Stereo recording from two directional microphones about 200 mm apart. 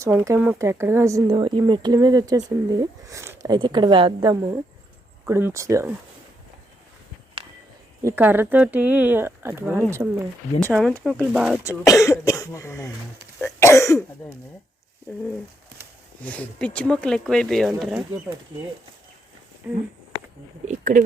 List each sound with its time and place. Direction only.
0.0 s speech: 10° right (ahead or behind)
5.2 s speech: 10° right (ahead or behind)
8.0 s speech: 10° right (ahead or behind)
10.6 s speech: centre (ahead or behind)
11.9 s cough: 15° left (ahead or behind)
16.2 s speech: 5° left (ahead or behind)
19.6 s speech: 10° right (ahead or behind)
20.7 s speech: 40° right (ahead or behind)